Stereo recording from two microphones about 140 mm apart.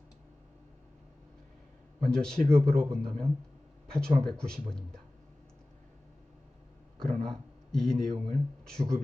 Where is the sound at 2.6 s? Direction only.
45° right (ahead or behind).